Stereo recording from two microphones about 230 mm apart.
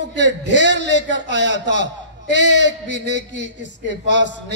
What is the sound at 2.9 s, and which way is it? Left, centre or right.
Speech, right.